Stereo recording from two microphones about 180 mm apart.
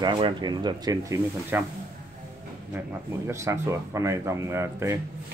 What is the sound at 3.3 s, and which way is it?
Speech, 15° right (ahead or behind).